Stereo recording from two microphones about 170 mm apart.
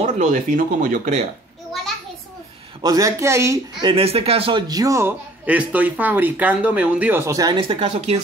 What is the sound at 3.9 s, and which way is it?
A man's voice, 35° right (ahead or behind).